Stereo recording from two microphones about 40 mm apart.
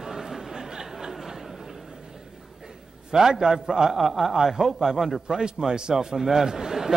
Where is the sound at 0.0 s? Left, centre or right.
Centre.